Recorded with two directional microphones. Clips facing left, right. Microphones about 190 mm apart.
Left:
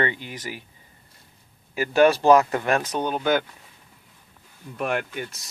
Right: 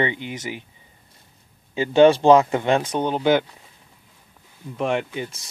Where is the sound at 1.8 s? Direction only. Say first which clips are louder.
Right 4 dB; 25° right (ahead or behind).